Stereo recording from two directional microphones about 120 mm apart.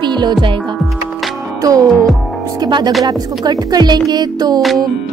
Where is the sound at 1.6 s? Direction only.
30° right (ahead or behind).